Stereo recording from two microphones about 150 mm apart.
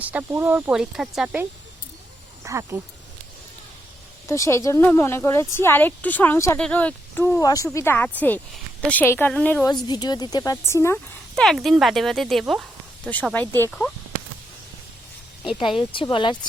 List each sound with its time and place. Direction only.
0.0 s speech: 10° right (ahead or behind)
2.4 s speech: 20° right (ahead or behind)
4.3 s speech: 20° left (ahead or behind)
9.6 s speech: 30° left (ahead or behind)
11.3 s speech: centre (ahead or behind)
13.3 s speech: 15° left (ahead or behind)
15.4 s speech: 35° left (ahead or behind)